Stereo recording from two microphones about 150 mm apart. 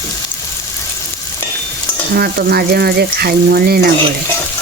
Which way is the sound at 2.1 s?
90° right.